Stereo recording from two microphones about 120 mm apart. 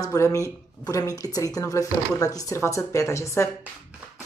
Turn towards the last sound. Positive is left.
turn(degrees=25)  # may be behind; listen again after turning